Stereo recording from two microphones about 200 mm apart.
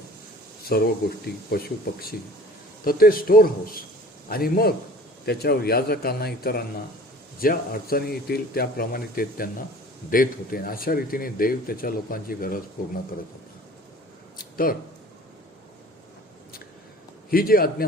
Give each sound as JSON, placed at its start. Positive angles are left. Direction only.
{"t": 0.6, "sound": "a man's voice", "side_deg": 50}
{"t": 14.5, "sound": "speech", "side_deg": 45}
{"t": 17.3, "sound": "a man's voice", "side_deg": 45}